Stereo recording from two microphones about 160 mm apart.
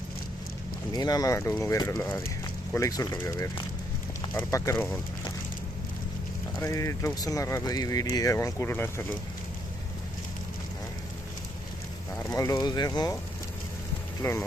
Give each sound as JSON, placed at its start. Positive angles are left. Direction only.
{"t": 0.9, "sound": "speech", "side_deg": 25}
{"t": 6.6, "sound": "speech", "side_deg": 20}
{"t": 12.2, "sound": "speech", "side_deg": 20}
{"t": 14.2, "sound": "speech", "side_deg": 20}